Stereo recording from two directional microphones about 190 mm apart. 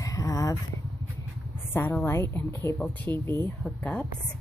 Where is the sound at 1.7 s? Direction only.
10° left (ahead or behind).